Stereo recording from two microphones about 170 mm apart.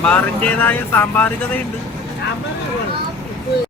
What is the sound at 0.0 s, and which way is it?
Speech, 10° left (ahead or behind).